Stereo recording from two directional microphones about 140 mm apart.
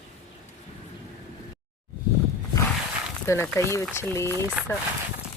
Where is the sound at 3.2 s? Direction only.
20° left (ahead or behind).